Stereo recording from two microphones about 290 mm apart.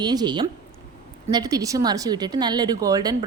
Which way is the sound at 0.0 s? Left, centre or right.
Centre.